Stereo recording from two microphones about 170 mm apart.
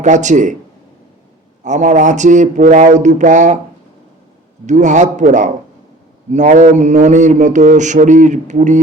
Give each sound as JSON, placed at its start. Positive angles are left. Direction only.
{"t": 0.0, "sound": "mantra", "side_deg": -45}
{"t": 1.6, "sound": "mantra", "side_deg": -45}
{"t": 4.6, "sound": "mantra", "side_deg": -45}